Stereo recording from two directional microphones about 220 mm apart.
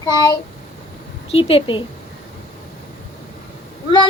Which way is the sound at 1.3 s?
25° left (ahead or behind).